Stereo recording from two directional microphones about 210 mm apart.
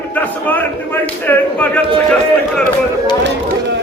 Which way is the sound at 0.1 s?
10° left (ahead or behind).